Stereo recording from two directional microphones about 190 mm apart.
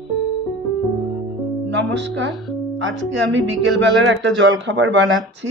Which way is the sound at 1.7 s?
70° right (ahead or behind).